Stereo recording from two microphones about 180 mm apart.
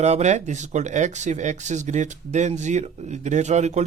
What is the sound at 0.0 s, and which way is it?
Speech, 40° right (ahead or behind).